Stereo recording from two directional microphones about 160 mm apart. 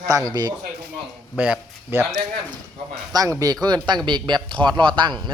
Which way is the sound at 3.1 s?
20° right (ahead or behind).